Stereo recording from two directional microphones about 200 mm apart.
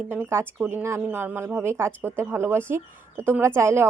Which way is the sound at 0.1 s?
10° right (ahead or behind).